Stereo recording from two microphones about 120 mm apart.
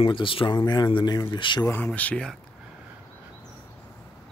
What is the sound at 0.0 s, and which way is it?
Speech, 45° left (ahead or behind).